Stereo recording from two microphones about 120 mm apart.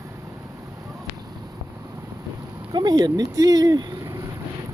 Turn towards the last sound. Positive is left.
turn(degrees=-30)  # may be behind; listen again after turning